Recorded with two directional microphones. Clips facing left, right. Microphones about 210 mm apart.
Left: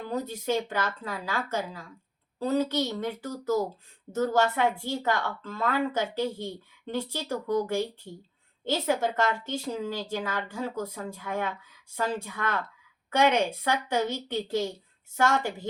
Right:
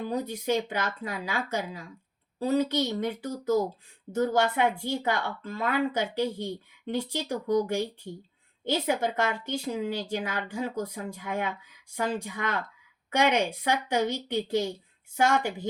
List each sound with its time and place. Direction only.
0.1 s speech: 15° right (ahead or behind)